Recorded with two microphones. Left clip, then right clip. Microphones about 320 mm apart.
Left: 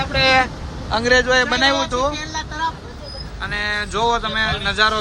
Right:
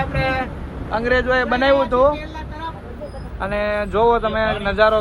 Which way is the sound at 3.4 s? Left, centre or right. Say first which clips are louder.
Right 2 dB; centre.